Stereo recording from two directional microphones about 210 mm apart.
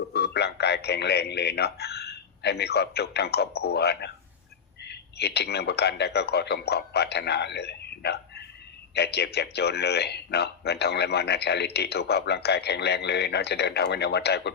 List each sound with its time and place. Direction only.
0.1 s a man's voice: 50° left (ahead or behind)